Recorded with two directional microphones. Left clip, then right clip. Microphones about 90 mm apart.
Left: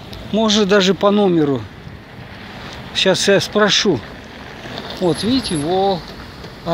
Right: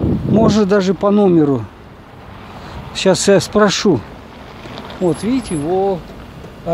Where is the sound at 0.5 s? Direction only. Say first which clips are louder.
Left 4 dB; 90° right.